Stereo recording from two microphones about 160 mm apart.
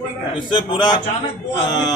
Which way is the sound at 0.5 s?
30° left (ahead or behind).